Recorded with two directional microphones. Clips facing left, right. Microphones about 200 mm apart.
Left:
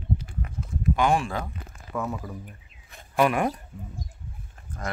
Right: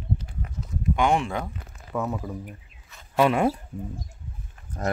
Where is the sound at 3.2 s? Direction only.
25° right (ahead or behind).